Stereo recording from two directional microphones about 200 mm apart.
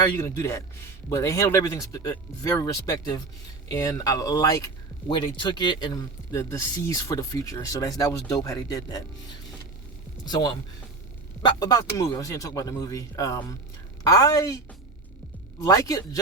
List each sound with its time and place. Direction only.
0.2 s speech: 15° left (ahead or behind)
10.2 s speech: 20° left (ahead or behind)
15.6 s speech: 15° left (ahead or behind)